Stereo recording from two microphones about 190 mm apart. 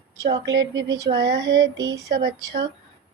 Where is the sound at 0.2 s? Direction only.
20° right (ahead or behind).